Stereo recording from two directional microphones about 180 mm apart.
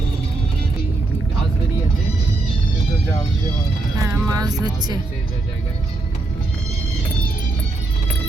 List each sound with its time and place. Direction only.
4.0 s music: 20° right (ahead or behind)